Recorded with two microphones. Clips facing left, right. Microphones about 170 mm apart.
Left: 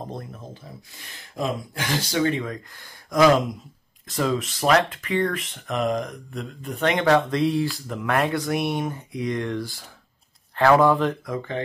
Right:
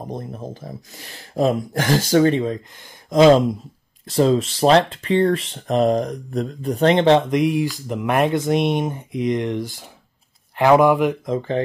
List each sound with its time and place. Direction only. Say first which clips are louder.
0.0 s a sound: right 4 dB; 20° right (ahead or behind)
0.3 s speech: right 8 dB; 40° right (ahead or behind)
2.3 s speech: right 7 dB; 25° right (ahead or behind)
11.3 s speech: right 7 dB; 30° right (ahead or behind)